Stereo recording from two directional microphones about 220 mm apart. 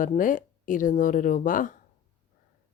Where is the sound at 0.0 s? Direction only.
35° left (ahead or behind).